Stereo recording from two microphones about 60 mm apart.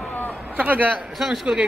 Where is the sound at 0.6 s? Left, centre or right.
Right.